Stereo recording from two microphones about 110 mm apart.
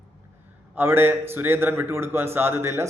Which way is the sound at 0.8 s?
20° right (ahead or behind).